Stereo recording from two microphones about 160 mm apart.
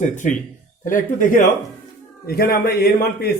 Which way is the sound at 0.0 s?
50° left (ahead or behind).